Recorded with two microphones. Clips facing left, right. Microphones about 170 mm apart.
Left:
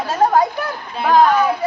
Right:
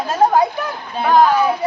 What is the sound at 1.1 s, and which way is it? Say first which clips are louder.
Speech: even; centre (ahead or behind).